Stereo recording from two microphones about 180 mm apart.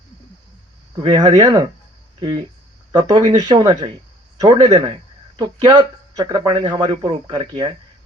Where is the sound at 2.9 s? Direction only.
25° right (ahead or behind).